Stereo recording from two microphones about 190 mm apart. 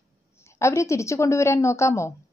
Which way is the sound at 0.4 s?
15° left (ahead or behind).